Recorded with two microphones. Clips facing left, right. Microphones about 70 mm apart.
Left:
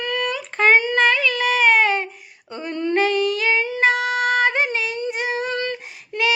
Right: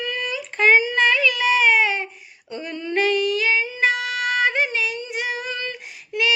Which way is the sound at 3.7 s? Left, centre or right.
Left.